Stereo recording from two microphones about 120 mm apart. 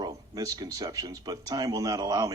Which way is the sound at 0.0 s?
30° right (ahead or behind).